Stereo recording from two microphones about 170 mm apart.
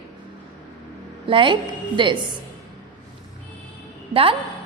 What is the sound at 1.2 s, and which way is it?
Speech, 30° right (ahead or behind).